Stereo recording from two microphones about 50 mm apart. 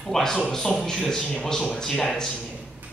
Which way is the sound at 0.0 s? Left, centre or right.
Centre.